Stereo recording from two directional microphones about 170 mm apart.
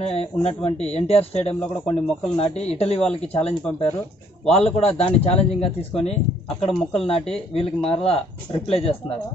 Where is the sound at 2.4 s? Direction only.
35° left (ahead or behind).